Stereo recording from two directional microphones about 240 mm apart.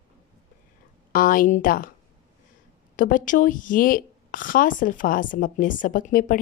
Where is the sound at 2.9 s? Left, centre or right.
Left.